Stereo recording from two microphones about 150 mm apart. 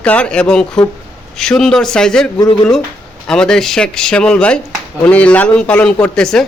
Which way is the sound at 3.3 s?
5° left (ahead or behind).